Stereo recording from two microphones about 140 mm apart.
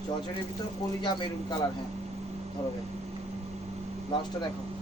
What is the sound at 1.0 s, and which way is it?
Speech, 35° left (ahead or behind).